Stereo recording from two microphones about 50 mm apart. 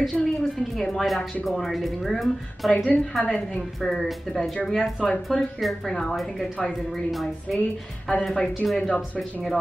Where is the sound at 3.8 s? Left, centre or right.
Centre.